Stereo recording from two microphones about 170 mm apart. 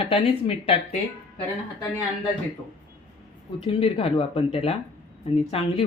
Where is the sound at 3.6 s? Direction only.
35° left (ahead or behind).